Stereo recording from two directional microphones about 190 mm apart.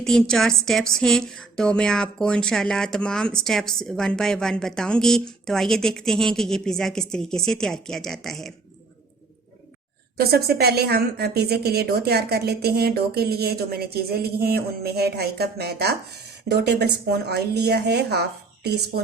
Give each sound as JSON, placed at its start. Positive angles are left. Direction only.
{"t": 0.0, "sound": "a woman's voice", "side_deg": 5}
{"t": 10.2, "sound": "a woman's voice", "side_deg": -55}